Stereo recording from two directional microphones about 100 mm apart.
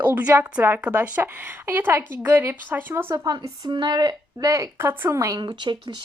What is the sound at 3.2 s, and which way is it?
Speech, 50° right (ahead or behind).